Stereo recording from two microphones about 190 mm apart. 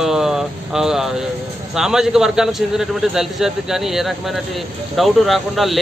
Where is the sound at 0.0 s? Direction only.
Centre (ahead or behind).